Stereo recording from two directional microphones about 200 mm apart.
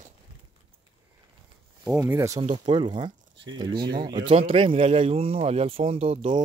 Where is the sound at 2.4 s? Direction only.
25° right (ahead or behind).